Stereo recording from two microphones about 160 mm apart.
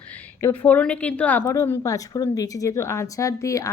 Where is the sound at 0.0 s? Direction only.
10° left (ahead or behind).